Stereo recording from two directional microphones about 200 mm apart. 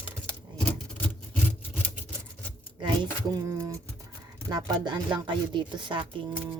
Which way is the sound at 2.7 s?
20° right (ahead or behind).